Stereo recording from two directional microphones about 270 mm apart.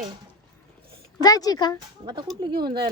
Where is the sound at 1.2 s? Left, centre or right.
Centre.